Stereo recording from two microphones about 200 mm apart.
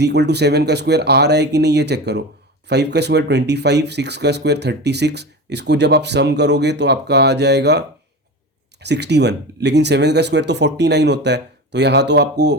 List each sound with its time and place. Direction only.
0.0 s speech: 55° right (ahead or behind)